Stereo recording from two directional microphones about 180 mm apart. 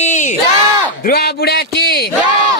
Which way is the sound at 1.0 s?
60° left (ahead or behind).